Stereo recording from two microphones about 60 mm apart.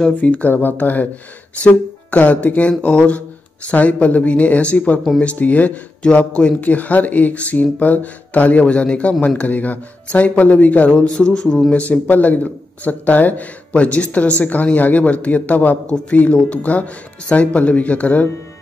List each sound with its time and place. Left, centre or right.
0.2 s speech: left
6.6 s speech: left; by 11.7 s centre
11.7 s speech: left